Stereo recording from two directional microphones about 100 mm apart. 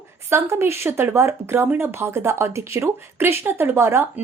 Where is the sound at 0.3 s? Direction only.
25° right (ahead or behind).